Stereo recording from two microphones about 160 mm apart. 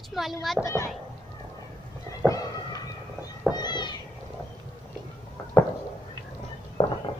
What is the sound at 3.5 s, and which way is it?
Cat, 25° left (ahead or behind).